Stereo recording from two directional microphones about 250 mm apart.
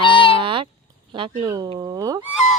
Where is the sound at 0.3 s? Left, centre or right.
Right.